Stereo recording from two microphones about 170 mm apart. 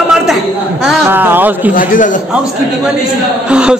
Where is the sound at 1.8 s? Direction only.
50° left (ahead or behind).